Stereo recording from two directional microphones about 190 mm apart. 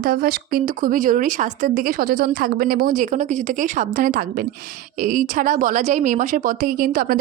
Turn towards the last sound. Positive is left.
turn(degrees=-50)  # may be behind; listen again after turning